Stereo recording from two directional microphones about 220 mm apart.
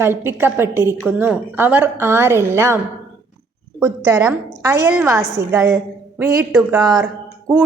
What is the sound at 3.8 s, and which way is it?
A woman's voice, 10° right (ahead or behind).